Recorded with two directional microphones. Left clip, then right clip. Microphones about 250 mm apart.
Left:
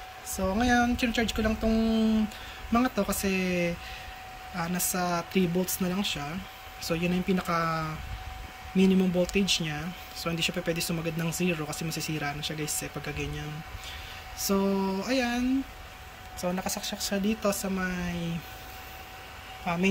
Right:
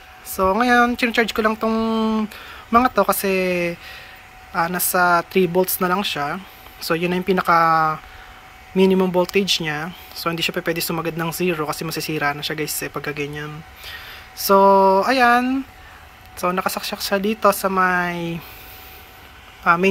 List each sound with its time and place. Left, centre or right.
0.6 s speech: centre
16.4 s speech: right
16.7 s speech: centre